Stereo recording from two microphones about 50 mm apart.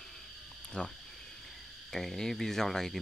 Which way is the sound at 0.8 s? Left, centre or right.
Left.